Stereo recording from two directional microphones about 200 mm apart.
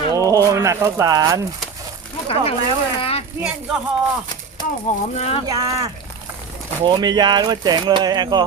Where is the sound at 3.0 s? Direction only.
30° left (ahead or behind).